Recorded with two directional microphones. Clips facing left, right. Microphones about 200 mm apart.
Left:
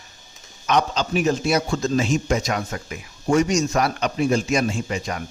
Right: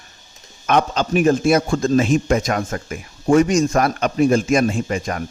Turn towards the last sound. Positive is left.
turn(degrees=-50)  # may be behind; listen again after turning